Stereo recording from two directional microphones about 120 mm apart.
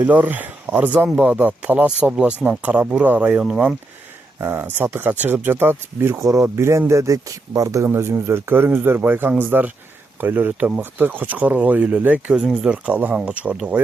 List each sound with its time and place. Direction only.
0.0 s speech: 15° right (ahead or behind)
4.4 s speech: 15° right (ahead or behind)